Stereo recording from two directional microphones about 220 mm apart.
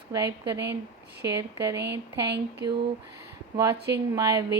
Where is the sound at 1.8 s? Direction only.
50° right (ahead or behind).